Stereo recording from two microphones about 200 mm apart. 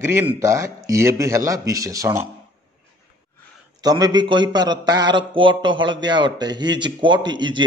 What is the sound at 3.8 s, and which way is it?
A man's voice, 20° right (ahead or behind).